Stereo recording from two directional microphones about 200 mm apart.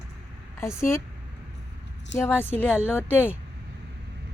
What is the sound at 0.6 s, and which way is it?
Speech, 15° left (ahead or behind).